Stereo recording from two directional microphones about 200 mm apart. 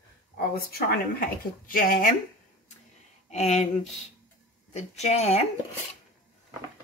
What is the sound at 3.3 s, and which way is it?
Speech, 35° left (ahead or behind).